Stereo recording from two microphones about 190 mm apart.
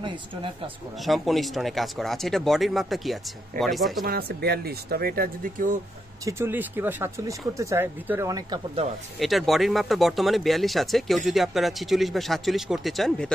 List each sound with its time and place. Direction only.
0.0 s speech: 30° right (ahead or behind)
1.0 s speech: centre (ahead or behind)
4.0 s speech: 55° right (ahead or behind)
6.2 s speech: 15° right (ahead or behind)
8.8 s speech: 35° right (ahead or behind)
9.2 s speech: centre (ahead or behind)